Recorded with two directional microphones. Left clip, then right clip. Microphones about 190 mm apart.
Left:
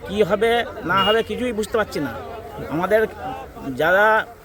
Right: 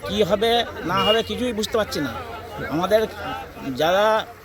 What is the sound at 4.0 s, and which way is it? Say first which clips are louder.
Speech: left 4 dB; 5° left (ahead or behind).